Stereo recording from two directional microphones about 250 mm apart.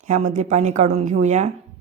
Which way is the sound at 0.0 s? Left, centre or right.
Right.